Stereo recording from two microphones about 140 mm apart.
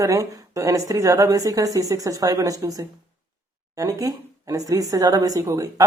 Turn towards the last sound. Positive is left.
turn(degrees=-20)  # may be behind; listen again after turning